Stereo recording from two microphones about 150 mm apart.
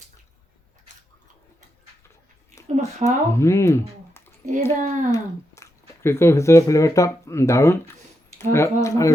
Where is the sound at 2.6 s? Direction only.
50° right (ahead or behind).